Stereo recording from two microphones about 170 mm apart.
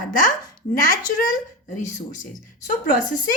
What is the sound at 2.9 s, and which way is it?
Speech, 50° left (ahead or behind).